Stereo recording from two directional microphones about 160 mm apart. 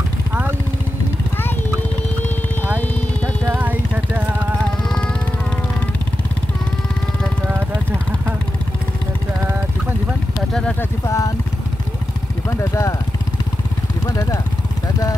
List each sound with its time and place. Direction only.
3.4 s vehicle: 10° right (ahead or behind)
4.8 s music: 5° left (ahead or behind)
7.4 s vehicle: 15° right (ahead or behind)
10.5 s a sound: 5° left (ahead or behind)
11.1 s vehicle: 20° left (ahead or behind)
12.4 s vehicle: 20° left (ahead or behind)
14.0 s vehicle: 20° left (ahead or behind)